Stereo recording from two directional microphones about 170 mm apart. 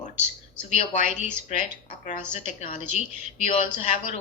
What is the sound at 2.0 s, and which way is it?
Speech, 45° left (ahead or behind).